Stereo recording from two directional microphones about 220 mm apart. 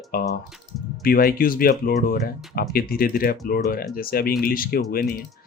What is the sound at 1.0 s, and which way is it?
Speech, 40° left (ahead or behind).